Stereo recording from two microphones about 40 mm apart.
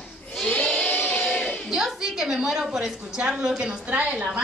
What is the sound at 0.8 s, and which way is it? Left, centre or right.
Choir, left.